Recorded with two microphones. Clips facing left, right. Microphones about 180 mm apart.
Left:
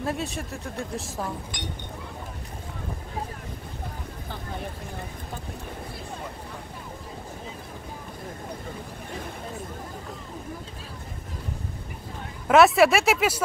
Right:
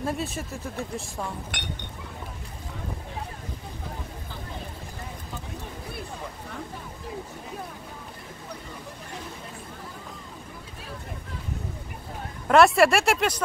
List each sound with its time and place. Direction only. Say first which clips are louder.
0.0 s speech: even; centre (ahead or behind)
1.5 s speech: left 2 dB; 65° right (ahead or behind)
12.4 s speech: left 1 dB; centre (ahead or behind)